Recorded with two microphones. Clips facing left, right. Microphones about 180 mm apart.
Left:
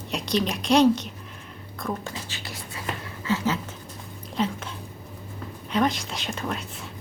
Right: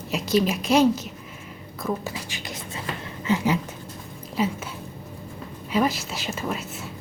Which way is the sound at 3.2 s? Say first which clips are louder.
Right 3 dB; 15° right (ahead or behind).